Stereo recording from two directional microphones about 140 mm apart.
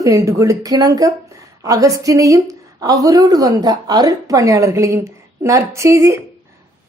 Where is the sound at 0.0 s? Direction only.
20° right (ahead or behind).